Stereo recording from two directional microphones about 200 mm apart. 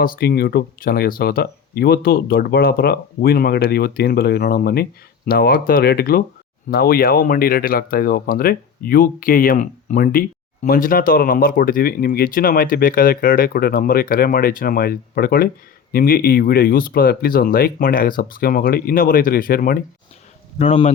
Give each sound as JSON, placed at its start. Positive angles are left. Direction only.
{"t": 0.0, "sound": "speech", "side_deg": 50}
{"t": 20.6, "sound": "speech", "side_deg": 35}